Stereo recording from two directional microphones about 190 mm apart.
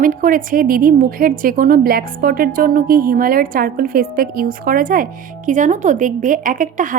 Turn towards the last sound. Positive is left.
turn(degrees=-45)  # may be behind; listen again after turning